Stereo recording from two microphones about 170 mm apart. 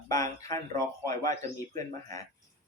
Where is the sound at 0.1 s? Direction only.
20° left (ahead or behind).